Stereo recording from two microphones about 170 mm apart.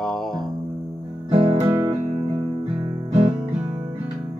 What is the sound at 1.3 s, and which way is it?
Music, 35° right (ahead or behind).